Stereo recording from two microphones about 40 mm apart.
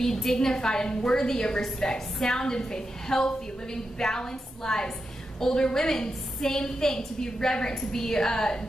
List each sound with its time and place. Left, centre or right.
0.0 s a woman's voice: centre